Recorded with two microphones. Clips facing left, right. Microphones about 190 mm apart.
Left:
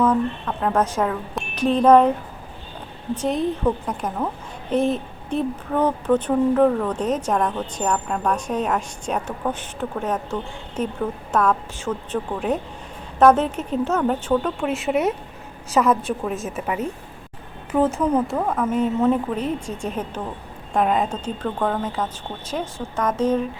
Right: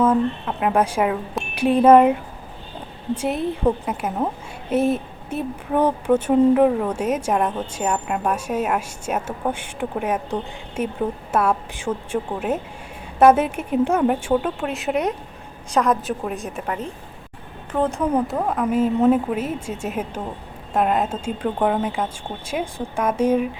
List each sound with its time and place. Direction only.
0.0 s a woman's voice: 10° right (ahead or behind)
3.2 s a woman's voice: 5° right (ahead or behind)
3.6 s a woman's voice: 30° right (ahead or behind)
4.0 s a woman's voice: 5° right (ahead or behind)